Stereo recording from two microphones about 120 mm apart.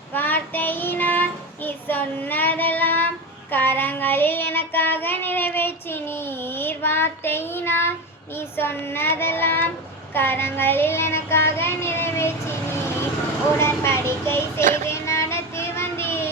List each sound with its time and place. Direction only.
0.1 s child singing: 15° left (ahead or behind)
13.6 s child singing: 20° left (ahead or behind)